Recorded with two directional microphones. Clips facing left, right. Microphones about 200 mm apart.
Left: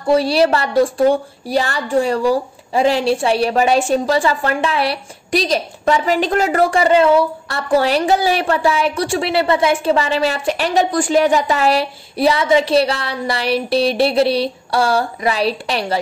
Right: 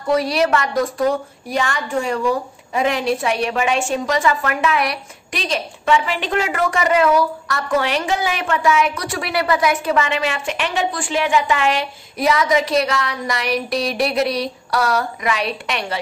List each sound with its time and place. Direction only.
0.0 s a woman's voice: 30° left (ahead or behind)